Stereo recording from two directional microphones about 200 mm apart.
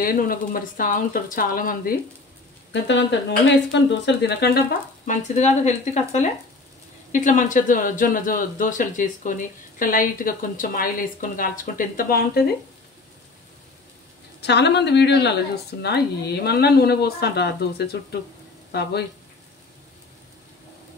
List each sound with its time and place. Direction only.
0.0 s a woman's voice: 45° left (ahead or behind)
2.7 s a woman's voice: 65° left (ahead or behind)
5.0 s a woman's voice: 35° left (ahead or behind)
14.4 s a woman's voice: 55° left (ahead or behind)